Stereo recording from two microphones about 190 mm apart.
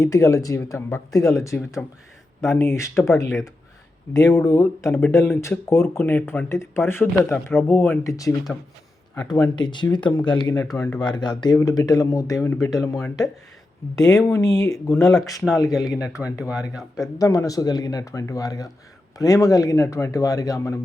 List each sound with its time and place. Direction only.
0.0 s speech: 15° left (ahead or behind)
9.1 s speech: 20° left (ahead or behind)
15.9 s speech: 5° right (ahead or behind)
17.2 s speech: 20° left (ahead or behind)